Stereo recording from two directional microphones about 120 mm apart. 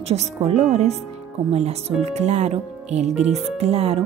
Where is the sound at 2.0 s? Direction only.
70° right (ahead or behind).